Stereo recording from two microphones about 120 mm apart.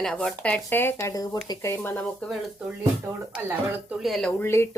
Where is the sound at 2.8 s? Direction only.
20° right (ahead or behind).